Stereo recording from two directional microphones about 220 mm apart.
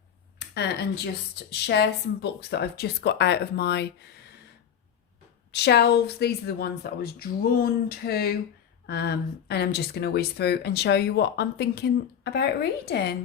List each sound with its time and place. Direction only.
0.3 s speech: 50° left (ahead or behind)
5.5 s speech: 50° left (ahead or behind)